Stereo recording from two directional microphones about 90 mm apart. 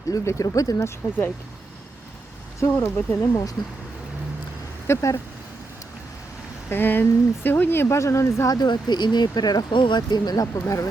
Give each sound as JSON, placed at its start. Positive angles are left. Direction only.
{"t": 0.1, "sound": "speech", "side_deg": 40}
{"t": 0.8, "sound": "speech", "side_deg": 30}
{"t": 2.6, "sound": "speech", "side_deg": 30}
{"t": 4.9, "sound": "speech", "side_deg": 30}
{"t": 6.7, "sound": "speech", "side_deg": 20}
{"t": 8.4, "sound": "speech", "side_deg": 50}
{"t": 9.7, "sound": "speech", "side_deg": 60}